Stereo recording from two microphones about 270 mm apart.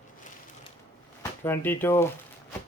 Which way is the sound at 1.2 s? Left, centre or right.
Centre.